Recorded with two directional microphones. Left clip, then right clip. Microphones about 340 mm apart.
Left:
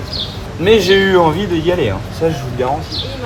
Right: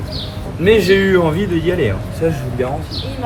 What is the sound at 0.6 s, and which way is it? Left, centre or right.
Speech, centre.